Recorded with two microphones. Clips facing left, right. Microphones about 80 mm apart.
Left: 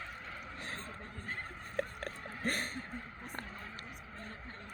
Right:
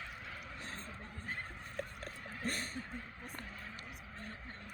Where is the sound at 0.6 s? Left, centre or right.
Left.